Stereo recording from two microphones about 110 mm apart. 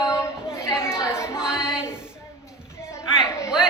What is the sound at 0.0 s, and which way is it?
Chatter, 25° left (ahead or behind).